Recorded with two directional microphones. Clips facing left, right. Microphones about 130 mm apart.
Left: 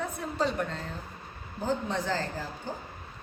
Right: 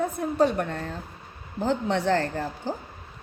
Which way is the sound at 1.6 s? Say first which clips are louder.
Right 6 dB; 70° right (ahead or behind).